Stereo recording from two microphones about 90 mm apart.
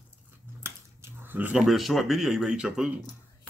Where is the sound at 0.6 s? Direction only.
30° right (ahead or behind).